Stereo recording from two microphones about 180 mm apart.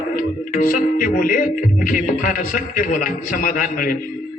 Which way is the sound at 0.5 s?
50° left (ahead or behind).